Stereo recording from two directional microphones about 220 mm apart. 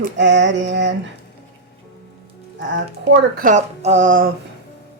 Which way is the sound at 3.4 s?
35° right (ahead or behind).